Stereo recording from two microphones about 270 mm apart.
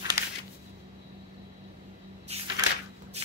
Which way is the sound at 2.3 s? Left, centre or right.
Right.